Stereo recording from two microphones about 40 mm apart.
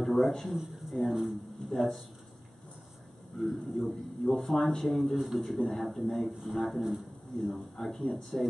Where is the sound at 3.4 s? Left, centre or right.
Centre.